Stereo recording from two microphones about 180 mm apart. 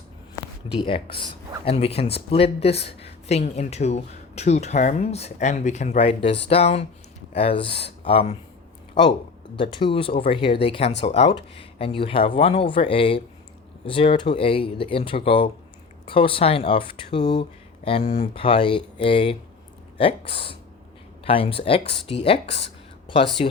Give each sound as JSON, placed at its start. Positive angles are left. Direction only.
{"t": 0.7, "sound": "speech", "side_deg": 30}
{"t": 9.6, "sound": "speech", "side_deg": 25}